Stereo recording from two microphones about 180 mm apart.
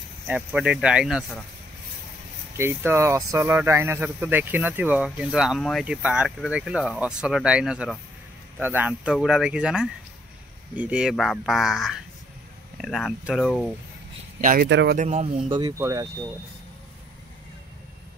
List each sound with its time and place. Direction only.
0.3 s speech: 5° right (ahead or behind)
2.5 s speech: 10° right (ahead or behind)
14.4 s speech: 50° right (ahead or behind)
14.7 s speech: 75° right (ahead or behind)
15.0 s speech: 35° right (ahead or behind)
15.5 s speech: 20° right (ahead or behind)